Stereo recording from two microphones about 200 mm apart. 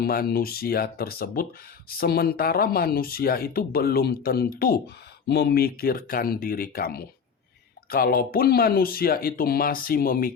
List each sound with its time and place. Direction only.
0.0 s speech: 50° left (ahead or behind)